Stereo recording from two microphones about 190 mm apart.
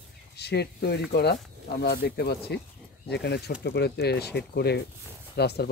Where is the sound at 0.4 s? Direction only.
60° left (ahead or behind).